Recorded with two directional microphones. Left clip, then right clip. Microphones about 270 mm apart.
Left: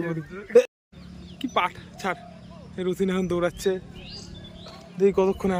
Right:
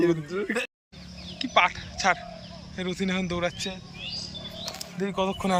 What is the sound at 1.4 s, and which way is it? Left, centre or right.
A man's voice, centre.